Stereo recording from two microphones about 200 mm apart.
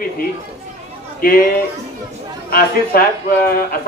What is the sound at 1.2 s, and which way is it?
Speech, 45° left (ahead or behind).